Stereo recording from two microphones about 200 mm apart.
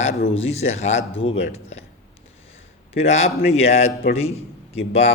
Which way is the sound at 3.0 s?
30° left (ahead or behind).